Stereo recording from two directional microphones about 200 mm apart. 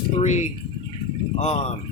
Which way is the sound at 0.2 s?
35° left (ahead or behind).